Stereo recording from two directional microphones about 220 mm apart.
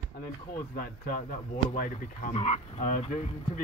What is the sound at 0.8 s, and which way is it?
Speech, 40° left (ahead or behind).